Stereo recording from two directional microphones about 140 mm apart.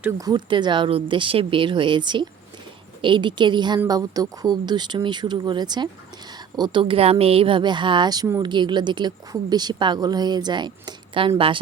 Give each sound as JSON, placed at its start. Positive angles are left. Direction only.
{"t": 0.2, "sound": "speech", "side_deg": -30}